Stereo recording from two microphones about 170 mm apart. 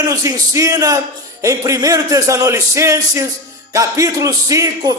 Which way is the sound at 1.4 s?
20° right (ahead or behind).